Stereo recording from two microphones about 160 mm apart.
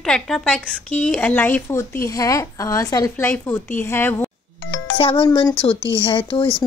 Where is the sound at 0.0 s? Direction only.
5° left (ahead or behind).